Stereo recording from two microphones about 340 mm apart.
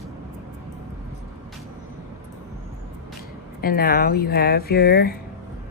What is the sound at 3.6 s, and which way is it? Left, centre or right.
Speech, left.